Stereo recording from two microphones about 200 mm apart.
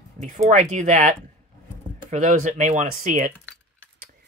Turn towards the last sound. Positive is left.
turn(degrees=-40)  # may be behind; listen again after turning